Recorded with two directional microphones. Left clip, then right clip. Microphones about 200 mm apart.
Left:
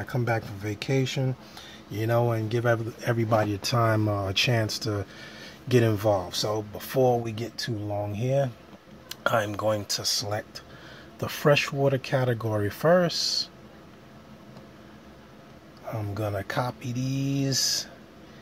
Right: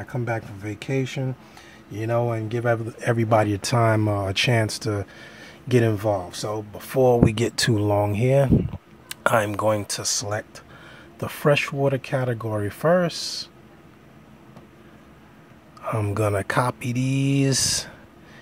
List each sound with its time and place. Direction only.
0.0 s speech: 5° left (ahead or behind)
2.9 s speech: 20° right (ahead or behind); by 7.0 s 5° right (ahead or behind)
7.2 s speech: 35° right (ahead or behind)
8.1 s speech: 25° right (ahead or behind); by 13.5 s 5° right (ahead or behind)
15.9 s speech: 35° right (ahead or behind)